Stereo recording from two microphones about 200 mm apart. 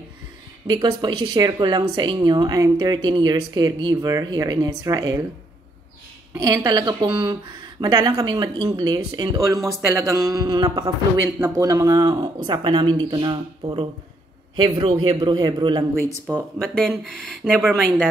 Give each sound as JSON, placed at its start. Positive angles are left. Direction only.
{"t": 0.7, "sound": "a woman's voice", "side_deg": -20}
{"t": 6.3, "sound": "a woman's voice", "side_deg": -20}
{"t": 16.3, "sound": "speech", "side_deg": 0}